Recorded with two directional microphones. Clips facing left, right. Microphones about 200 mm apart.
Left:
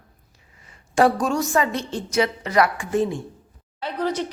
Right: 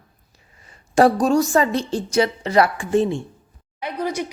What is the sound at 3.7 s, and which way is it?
Speech, 15° right (ahead or behind).